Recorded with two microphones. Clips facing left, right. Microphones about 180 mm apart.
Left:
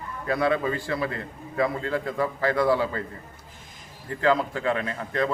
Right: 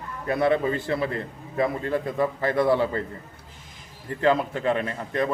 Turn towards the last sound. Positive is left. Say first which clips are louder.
# right 1 dB
turn(degrees=-20)  # may be behind; listen again after turning